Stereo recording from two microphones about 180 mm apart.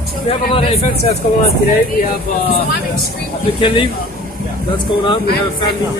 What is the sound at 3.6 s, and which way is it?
Speech, 30° left (ahead or behind).